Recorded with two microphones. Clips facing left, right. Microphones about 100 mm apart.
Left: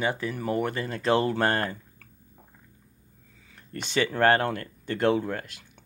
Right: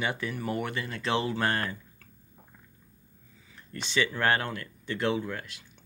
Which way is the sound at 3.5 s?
50° left (ahead or behind).